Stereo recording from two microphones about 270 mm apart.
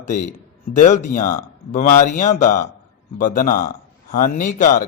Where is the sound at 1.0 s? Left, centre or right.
Left.